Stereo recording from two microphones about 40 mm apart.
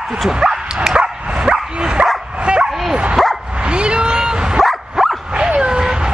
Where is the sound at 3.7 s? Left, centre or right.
Right.